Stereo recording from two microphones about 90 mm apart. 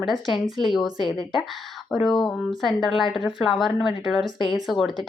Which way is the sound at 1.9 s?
Centre (ahead or behind).